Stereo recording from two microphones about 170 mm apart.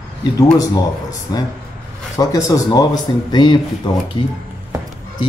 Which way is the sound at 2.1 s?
20° left (ahead or behind).